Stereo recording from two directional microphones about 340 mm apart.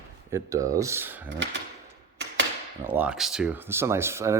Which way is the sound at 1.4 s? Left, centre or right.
Right.